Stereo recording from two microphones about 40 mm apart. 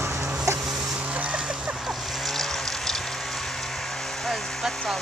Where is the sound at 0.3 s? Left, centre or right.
Centre.